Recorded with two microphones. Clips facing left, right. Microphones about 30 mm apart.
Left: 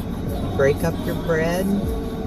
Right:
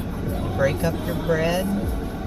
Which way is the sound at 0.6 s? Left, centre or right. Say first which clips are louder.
Left 3 dB; centre.